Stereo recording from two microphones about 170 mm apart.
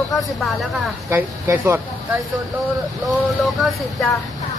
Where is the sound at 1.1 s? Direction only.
10° right (ahead or behind).